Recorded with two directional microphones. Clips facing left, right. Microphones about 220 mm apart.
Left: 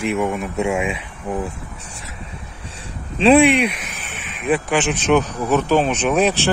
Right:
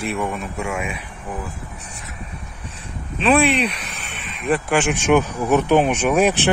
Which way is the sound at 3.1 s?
25° left (ahead or behind).